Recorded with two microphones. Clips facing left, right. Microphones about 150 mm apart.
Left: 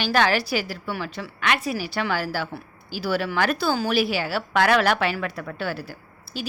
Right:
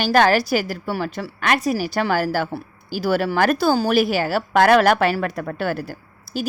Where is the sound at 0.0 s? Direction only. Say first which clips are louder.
Right 5 dB; 45° right (ahead or behind).